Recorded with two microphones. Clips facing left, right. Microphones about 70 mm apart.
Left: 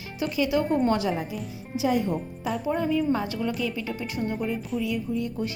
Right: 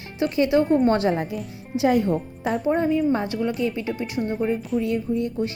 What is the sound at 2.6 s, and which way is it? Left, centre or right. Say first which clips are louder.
Speech: right 4 dB; right.